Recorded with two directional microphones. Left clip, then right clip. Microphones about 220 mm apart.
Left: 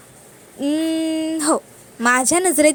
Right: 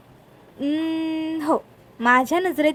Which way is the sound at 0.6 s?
10° left (ahead or behind).